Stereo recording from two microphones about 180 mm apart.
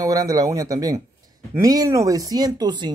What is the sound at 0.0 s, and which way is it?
Speech, 20° right (ahead or behind).